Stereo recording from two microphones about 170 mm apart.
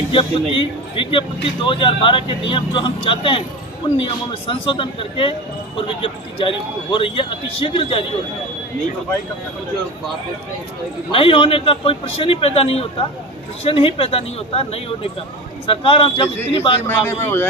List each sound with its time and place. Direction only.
0.1 s speech: 30° left (ahead or behind)
11.1 s speech: 30° left (ahead or behind)
16.8 s speech: 15° left (ahead or behind)